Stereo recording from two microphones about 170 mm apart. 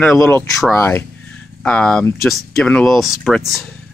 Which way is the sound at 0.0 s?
10° left (ahead or behind).